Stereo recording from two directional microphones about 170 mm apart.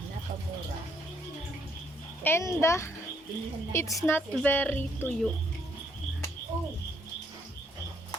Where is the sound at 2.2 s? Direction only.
15° left (ahead or behind).